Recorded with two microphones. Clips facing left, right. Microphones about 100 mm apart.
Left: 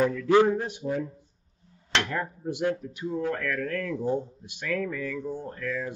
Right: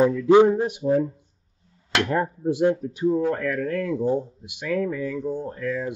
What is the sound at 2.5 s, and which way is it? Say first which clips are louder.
Speech: right 7 dB; 25° right (ahead or behind).